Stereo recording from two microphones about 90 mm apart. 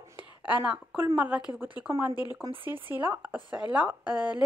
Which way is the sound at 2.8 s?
25° right (ahead or behind).